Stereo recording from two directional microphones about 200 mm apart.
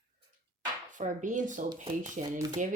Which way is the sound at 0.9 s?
40° right (ahead or behind).